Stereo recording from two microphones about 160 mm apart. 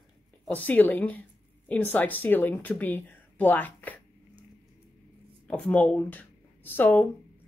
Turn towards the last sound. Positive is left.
turn(degrees=10)  # may be behind; listen again after turning